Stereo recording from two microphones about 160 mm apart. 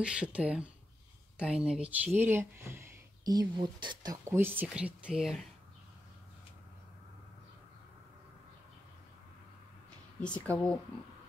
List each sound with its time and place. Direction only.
0.0 s speech: 5° right (ahead or behind)
3.3 s speech: 25° right (ahead or behind); by 5.5 s centre (ahead or behind)
10.4 s speech: 10° left (ahead or behind)